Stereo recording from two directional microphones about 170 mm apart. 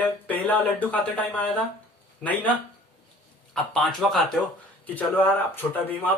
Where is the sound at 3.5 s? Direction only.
5° left (ahead or behind).